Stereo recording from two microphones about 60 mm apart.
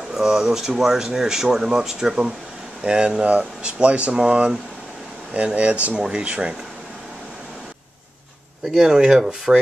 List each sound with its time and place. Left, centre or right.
0.1 s speech: centre
8.6 s speech: centre